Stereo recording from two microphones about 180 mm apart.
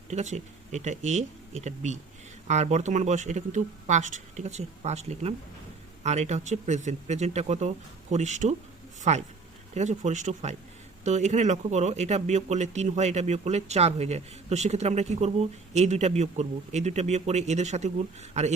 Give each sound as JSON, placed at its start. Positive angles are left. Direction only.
{"t": 0.1, "sound": "speech", "side_deg": -40}